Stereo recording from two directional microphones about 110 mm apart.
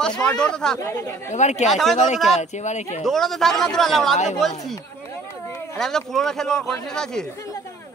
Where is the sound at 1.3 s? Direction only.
90° left.